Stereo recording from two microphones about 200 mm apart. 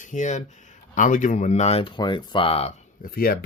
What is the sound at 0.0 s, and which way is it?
Speech, 40° left (ahead or behind).